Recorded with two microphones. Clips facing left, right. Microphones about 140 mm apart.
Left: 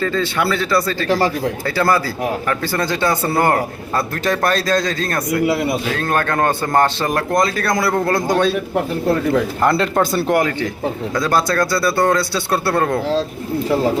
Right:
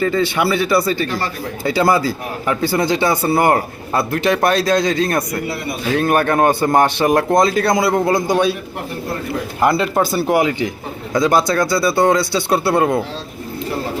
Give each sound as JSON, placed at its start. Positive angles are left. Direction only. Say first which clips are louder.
{"t": 0.0, "sound": "speech", "louder": "right 2 dB", "side_deg": -15}
{"t": 1.0, "sound": "speech", "louder": "left 6 dB", "side_deg": 90}
{"t": 1.6, "sound": "speech", "louder": "right 4 dB", "side_deg": -15}
{"t": 9.6, "sound": "speech", "louder": "even", "side_deg": -5}